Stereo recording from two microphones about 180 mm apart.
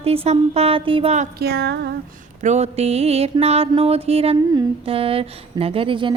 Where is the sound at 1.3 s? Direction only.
65° right (ahead or behind).